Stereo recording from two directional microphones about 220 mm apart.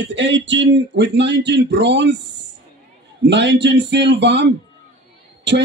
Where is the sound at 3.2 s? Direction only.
50° right (ahead or behind).